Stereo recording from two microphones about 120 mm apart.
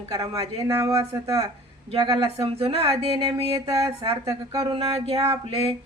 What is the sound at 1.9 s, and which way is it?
Speech, 45° right (ahead or behind).